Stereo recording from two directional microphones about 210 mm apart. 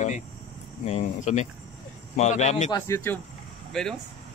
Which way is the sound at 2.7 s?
10° left (ahead or behind).